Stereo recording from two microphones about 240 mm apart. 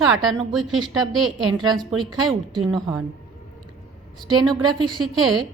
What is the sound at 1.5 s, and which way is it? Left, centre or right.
Speech, centre.